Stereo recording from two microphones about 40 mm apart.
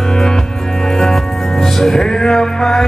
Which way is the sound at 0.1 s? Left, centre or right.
Centre.